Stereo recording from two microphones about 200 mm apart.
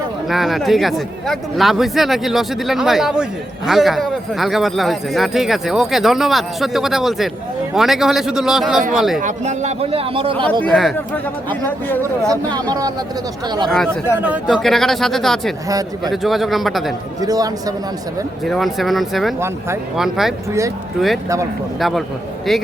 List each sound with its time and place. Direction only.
0.3 s speech: centre (ahead or behind)
9.2 s a man's voice: 35° right (ahead or behind)
10.6 s speech: 5° left (ahead or behind)
12.3 s a man's voice: 20° right (ahead or behind)
13.7 s speech: 5° left (ahead or behind)
17.2 s a man's voice: 20° right (ahead or behind)
18.4 s speech: centre (ahead or behind)
21.8 s speech: centre (ahead or behind)